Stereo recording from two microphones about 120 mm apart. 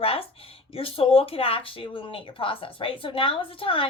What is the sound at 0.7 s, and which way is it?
A woman's voice, 50° left (ahead or behind).